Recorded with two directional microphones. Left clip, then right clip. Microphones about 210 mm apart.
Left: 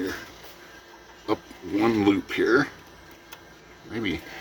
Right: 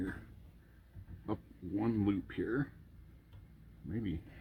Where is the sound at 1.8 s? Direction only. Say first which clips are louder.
Left 14 dB; 5° left (ahead or behind).